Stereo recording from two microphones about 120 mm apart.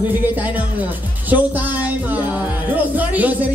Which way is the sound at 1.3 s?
15° right (ahead or behind).